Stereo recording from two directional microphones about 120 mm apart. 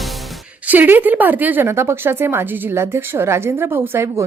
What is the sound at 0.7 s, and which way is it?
A woman's voice, 15° right (ahead or behind).